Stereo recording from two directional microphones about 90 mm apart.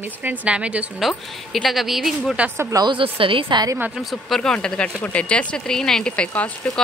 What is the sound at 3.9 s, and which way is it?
Speech, centre (ahead or behind).